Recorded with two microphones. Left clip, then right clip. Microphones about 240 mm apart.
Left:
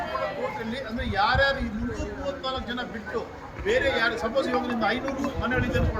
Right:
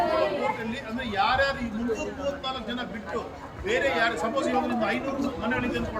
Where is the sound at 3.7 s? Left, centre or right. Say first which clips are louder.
Left 1 dB; centre.